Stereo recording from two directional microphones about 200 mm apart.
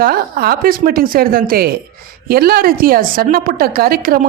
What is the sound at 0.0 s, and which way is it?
A woman's voice, 45° right (ahead or behind).